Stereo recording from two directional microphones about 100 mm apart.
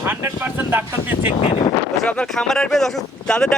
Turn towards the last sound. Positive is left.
turn(degrees=5)  # may be behind; listen again after turning